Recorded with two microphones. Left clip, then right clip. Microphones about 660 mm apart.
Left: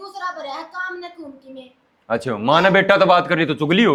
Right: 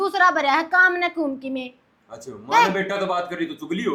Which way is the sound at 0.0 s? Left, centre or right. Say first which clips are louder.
Right 10 dB; right.